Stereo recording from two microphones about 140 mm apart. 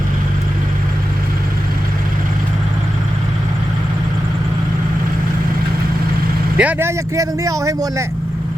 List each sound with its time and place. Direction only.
6.6 s speech: 15° right (ahead or behind)